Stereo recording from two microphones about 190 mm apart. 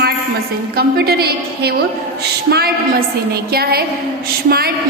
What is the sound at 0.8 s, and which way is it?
Speech, 55° right (ahead or behind).